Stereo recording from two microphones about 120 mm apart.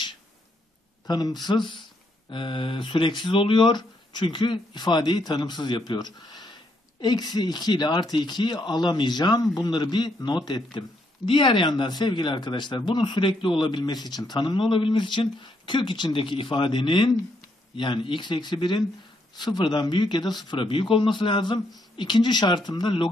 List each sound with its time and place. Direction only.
1.0 s speech: 35° left (ahead or behind)